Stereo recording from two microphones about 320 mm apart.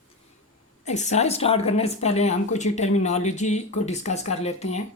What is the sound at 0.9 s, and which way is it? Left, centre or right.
A woman's voice, left.